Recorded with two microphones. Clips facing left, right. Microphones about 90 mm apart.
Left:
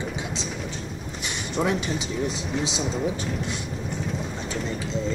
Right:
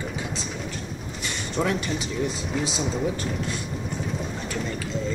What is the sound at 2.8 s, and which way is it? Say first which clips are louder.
Speech: even; centre (ahead or behind).